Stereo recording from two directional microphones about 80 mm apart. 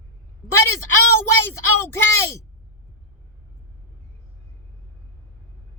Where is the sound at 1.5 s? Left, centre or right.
Left.